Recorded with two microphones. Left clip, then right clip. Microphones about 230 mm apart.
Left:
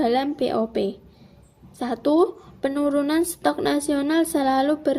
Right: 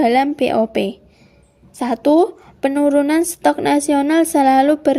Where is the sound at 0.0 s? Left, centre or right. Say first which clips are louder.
Right 7 dB; right.